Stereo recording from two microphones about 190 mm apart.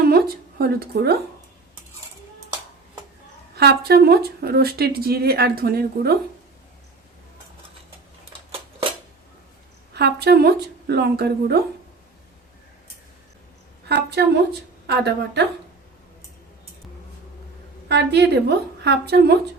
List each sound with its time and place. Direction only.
0.0 s a sound: 50° right (ahead or behind)
3.5 s speech: 55° right (ahead or behind)
9.9 s speech: 60° right (ahead or behind)
13.8 s speech: 60° right (ahead or behind)
17.8 s speech: 65° right (ahead or behind)